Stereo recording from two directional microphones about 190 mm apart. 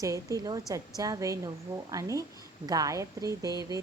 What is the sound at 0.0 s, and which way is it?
A woman's voice, 15° right (ahead or behind).